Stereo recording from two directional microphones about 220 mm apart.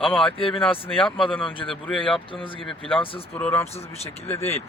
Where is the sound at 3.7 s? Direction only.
30° left (ahead or behind).